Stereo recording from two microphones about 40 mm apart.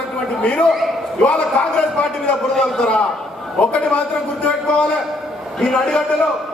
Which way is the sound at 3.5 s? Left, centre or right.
Left.